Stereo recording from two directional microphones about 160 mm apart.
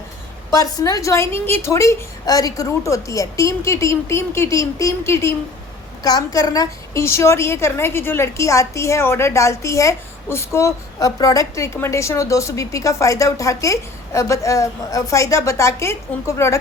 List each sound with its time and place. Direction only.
0.5 s a woman's voice: 20° left (ahead or behind)